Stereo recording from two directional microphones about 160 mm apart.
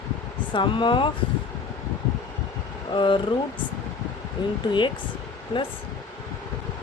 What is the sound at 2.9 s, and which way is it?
Speech, 30° left (ahead or behind).